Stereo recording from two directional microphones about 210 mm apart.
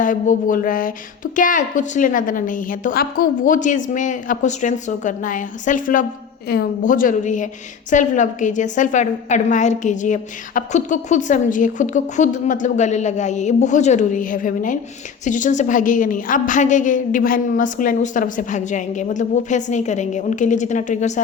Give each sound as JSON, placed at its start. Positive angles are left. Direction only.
{"t": 0.0, "sound": "a woman's voice", "side_deg": 40}